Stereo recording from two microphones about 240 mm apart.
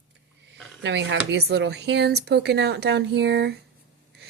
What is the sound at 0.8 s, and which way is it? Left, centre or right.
A woman's voice, right.